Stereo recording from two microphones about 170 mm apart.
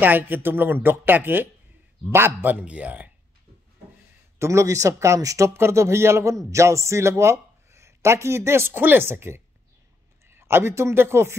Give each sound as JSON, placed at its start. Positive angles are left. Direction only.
{"t": 0.0, "sound": "speech", "side_deg": -10}
{"t": 4.4, "sound": "speech", "side_deg": -15}